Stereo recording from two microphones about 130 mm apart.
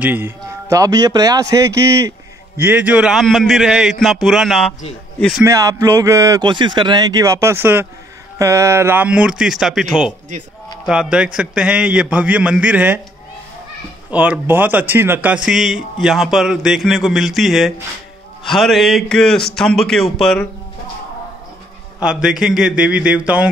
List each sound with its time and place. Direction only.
0.0 s a man's voice: 15° right (ahead or behind); by 4.7 s centre (ahead or behind)
5.4 s a man's voice: 25° right (ahead or behind)
14.1 s a man's voice: 10° right (ahead or behind)
22.0 s a man's voice: 5° right (ahead or behind)